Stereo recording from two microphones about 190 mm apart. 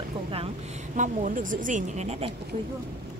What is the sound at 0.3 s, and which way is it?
A woman's voice, 35° right (ahead or behind).